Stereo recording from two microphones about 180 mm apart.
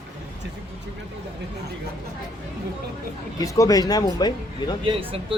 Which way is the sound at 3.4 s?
20° left (ahead or behind).